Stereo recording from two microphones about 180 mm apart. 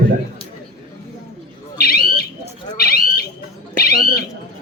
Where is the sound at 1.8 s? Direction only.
60° left (ahead or behind).